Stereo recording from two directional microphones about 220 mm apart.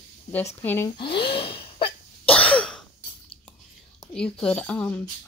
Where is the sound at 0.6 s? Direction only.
10° left (ahead or behind).